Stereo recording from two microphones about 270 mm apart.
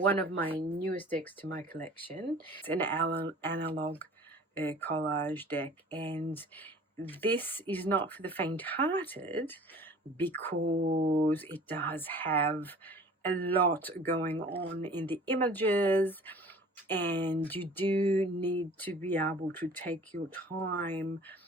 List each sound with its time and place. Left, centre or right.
0.0 s speech: centre
10.8 s speech: centre
11.3 s speech: centre